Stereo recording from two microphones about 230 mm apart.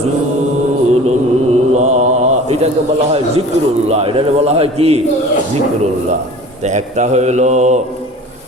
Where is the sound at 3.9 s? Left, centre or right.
Right.